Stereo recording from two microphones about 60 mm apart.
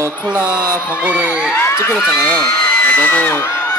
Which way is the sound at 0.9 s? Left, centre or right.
Right.